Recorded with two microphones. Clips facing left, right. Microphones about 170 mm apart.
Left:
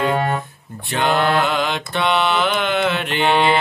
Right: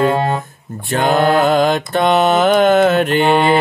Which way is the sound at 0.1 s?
25° right (ahead or behind).